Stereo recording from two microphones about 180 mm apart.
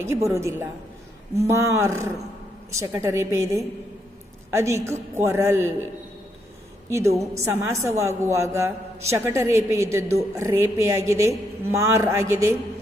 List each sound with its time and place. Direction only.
0.3 s a woman's voice: 15° right (ahead or behind)
6.9 s a woman's voice: 15° right (ahead or behind)